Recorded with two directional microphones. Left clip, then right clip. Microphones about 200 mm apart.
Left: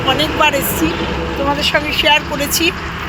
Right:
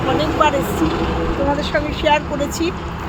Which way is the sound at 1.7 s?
5° left (ahead or behind).